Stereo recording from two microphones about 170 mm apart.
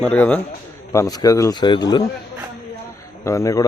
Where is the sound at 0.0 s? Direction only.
5° left (ahead or behind).